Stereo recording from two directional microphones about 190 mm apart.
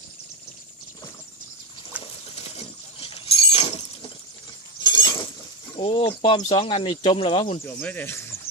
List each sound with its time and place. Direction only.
1.9 s a sound: 10° right (ahead or behind)
3.0 s chink: 30° left (ahead or behind)
5.7 s speech: 25° left (ahead or behind)
7.6 s speech: 10° left (ahead or behind)